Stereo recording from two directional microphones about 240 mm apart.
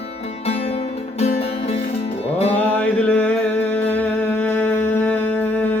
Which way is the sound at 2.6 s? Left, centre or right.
Centre.